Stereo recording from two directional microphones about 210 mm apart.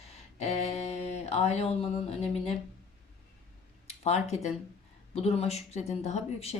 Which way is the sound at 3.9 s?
30° left (ahead or behind).